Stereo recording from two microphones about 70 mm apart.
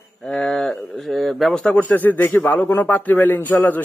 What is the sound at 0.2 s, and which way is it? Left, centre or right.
Speech, centre.